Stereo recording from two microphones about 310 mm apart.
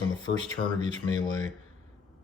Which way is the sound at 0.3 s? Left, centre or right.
Left.